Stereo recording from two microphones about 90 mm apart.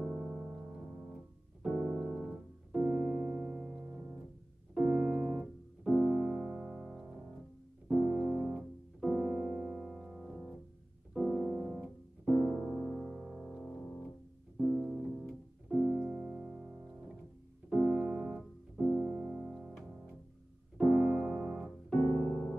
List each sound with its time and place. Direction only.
0.0 s music: 20° right (ahead or behind)
1.8 s keyboard: 25° right (ahead or behind)
2.0 s piano: 10° right (ahead or behind)
2.7 s keyboard: 20° right (ahead or behind)
3.4 s music: 5° right (ahead or behind)
4.7 s piano: 20° right (ahead or behind); by 10.5 s 5° right (ahead or behind)
11.1 s music: centre (ahead or behind)
11.8 s piano: centre (ahead or behind)
12.9 s music: centre (ahead or behind)
15.7 s piano: 15° right (ahead or behind)
17.9 s keyboard: 10° right (ahead or behind)
18.8 s music: 15° right (ahead or behind)
20.8 s music: 25° right (ahead or behind)
21.1 s piano: 10° right (ahead or behind)